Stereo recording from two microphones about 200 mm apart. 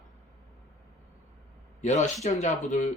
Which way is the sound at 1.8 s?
35° left (ahead or behind).